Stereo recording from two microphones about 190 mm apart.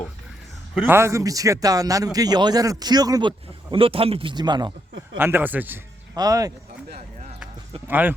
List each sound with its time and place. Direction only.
0.9 s a man's voice: 15° right (ahead or behind)
5.1 s a man's voice: 10° right (ahead or behind)
6.9 s a sound: 35° right (ahead or behind)
7.9 s speech: 10° right (ahead or behind)